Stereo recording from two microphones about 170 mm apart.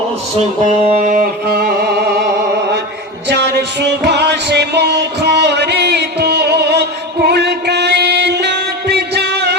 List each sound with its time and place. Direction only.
0.6 s music: 45° right (ahead or behind)
1.5 s music: 65° right (ahead or behind)
3.2 s music: 85° right